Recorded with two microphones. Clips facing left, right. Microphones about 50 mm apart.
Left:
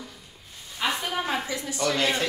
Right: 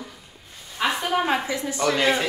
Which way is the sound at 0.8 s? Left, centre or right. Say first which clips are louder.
Right 5 dB; centre.